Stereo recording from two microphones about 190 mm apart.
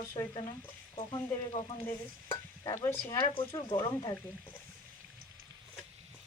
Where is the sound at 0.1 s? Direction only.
20° left (ahead or behind).